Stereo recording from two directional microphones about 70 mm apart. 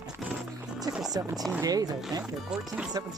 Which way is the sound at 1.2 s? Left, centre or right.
Right.